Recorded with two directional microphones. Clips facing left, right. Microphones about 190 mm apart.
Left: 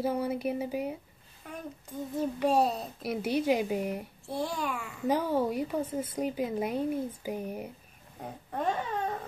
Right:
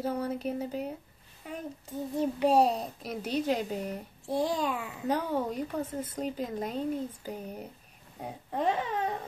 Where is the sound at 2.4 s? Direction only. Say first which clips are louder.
Right 2 dB; 10° right (ahead or behind).